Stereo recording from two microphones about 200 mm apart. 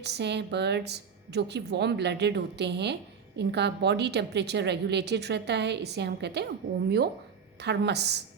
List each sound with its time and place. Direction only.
0.0 s a woman's voice: 55° right (ahead or behind)
7.6 s a woman's voice: 60° right (ahead or behind)